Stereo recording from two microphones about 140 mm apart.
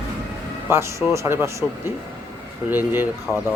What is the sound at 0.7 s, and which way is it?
Speech, 20° right (ahead or behind).